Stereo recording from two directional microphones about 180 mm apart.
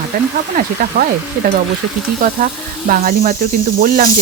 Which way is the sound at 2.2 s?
50° right (ahead or behind).